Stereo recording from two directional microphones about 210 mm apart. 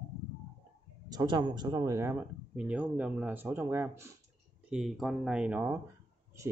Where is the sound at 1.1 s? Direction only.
20° right (ahead or behind).